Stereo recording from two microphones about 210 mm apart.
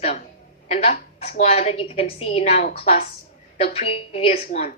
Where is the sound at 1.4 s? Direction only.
30° left (ahead or behind).